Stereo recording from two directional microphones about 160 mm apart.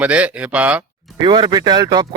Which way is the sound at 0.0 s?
10° right (ahead or behind).